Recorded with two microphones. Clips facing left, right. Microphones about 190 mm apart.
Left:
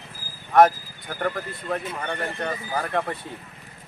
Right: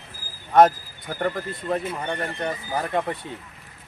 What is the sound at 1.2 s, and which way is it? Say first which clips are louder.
Speech: right 1 dB; 10° right (ahead or behind).